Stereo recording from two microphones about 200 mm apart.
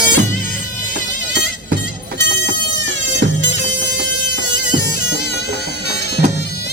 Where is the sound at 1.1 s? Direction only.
65° right (ahead or behind).